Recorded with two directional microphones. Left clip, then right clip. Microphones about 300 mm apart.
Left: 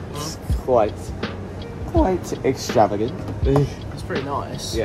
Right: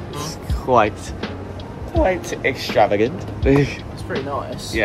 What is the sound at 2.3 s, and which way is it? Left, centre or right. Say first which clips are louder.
Speech: right 1 dB; centre.